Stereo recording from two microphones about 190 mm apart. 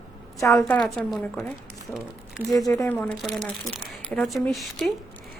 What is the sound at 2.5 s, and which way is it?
Speech, 20° left (ahead or behind).